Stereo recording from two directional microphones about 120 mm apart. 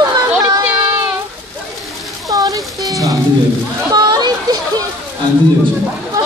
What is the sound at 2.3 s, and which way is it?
Music, 30° right (ahead or behind).